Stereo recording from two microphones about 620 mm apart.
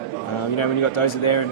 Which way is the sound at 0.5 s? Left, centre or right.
Left.